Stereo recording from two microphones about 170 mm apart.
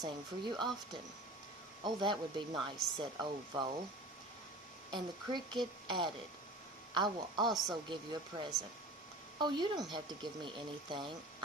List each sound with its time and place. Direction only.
0.0 s speech: 25° right (ahead or behind)
1.8 s speech: 25° right (ahead or behind)
4.9 s speech: 25° right (ahead or behind)
7.4 s a woman's voice: centre (ahead or behind)
7.9 s speech: 25° right (ahead or behind)